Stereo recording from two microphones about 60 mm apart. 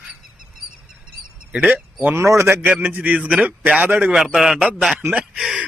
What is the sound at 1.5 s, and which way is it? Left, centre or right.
Speech, right.